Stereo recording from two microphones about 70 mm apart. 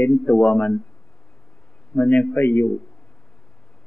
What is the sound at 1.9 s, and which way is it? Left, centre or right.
Speech, centre.